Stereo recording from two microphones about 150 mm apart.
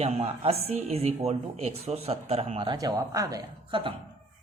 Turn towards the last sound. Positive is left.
turn(degrees=-25)  # may be behind; listen again after turning